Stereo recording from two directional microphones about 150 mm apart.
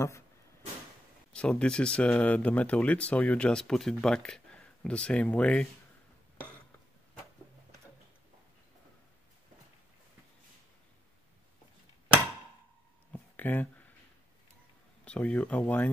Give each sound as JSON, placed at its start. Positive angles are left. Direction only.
{"t": 1.3, "sound": "speech", "side_deg": 5}
{"t": 13.1, "sound": "a sound", "side_deg": 10}
{"t": 15.0, "sound": "speech", "side_deg": 10}